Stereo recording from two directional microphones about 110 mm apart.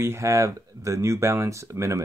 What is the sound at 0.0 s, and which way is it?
Speech, 25° right (ahead or behind).